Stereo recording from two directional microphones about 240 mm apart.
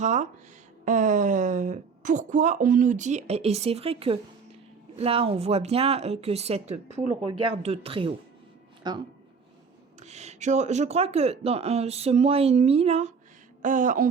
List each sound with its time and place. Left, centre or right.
0.0 s a woman's voice: right
10.0 s a woman's voice: right